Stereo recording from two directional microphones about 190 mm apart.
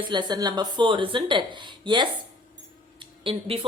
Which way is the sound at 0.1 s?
20° right (ahead or behind).